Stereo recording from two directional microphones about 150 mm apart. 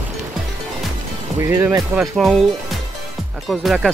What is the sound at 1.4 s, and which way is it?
Speech, 20° right (ahead or behind).